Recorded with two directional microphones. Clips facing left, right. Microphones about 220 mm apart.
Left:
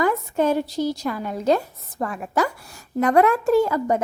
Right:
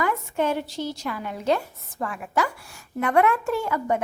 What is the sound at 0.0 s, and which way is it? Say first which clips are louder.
A woman's voice: left 4 dB; 40° left (ahead or behind).